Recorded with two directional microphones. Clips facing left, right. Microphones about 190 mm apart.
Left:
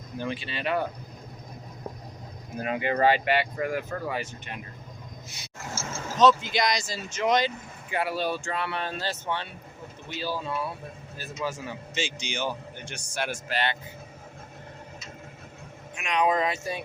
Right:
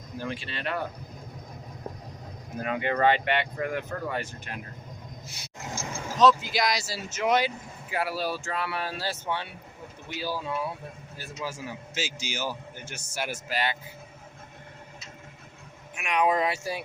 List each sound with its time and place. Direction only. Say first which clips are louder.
0.2 s speech: left 2 dB; centre (ahead or behind)
3.1 s speech: left 1 dB; 5° left (ahead or behind)
5.5 s a sound: even; 15° right (ahead or behind)
6.1 s speech: left 1 dB; centre (ahead or behind)
16.0 s speech: even; 10° right (ahead or behind)